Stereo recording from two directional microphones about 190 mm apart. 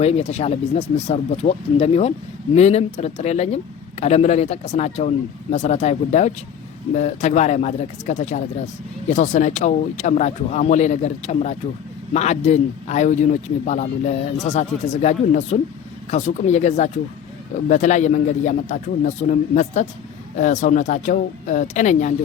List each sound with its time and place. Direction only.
0.0 s speech: 35° left (ahead or behind)